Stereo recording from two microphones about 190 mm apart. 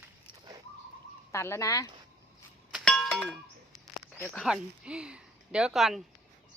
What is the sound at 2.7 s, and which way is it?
Doorbell, centre (ahead or behind).